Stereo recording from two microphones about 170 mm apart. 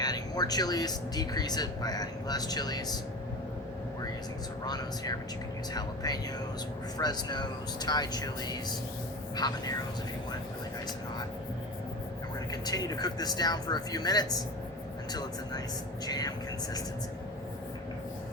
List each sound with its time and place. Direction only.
0.0 s speech: 25° left (ahead or behind)
4.6 s speech: 25° left (ahead or behind)
12.5 s speech: 20° left (ahead or behind)
16.0 s speech: 20° left (ahead or behind)